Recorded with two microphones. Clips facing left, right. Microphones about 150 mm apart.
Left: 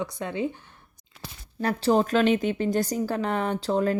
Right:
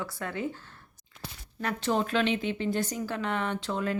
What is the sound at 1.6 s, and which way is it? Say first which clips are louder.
Speech: left 6 dB; 35° left (ahead or behind).